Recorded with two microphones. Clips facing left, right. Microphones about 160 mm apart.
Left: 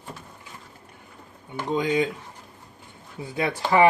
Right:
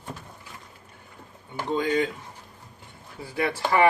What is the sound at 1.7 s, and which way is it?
Speech, 15° left (ahead or behind).